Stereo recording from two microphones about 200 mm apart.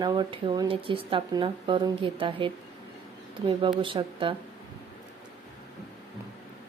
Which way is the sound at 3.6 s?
25° right (ahead or behind).